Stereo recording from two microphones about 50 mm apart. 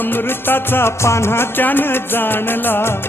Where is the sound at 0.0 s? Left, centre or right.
Left.